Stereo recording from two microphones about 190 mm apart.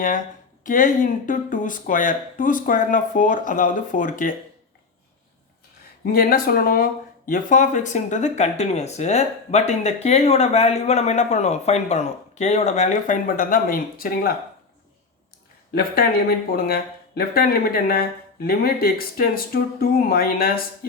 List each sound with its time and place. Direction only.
0.6 s speech: 45° left (ahead or behind)
6.1 s speech: 50° left (ahead or behind)
15.7 s speech: 50° left (ahead or behind)
17.2 s speech: 50° left (ahead or behind)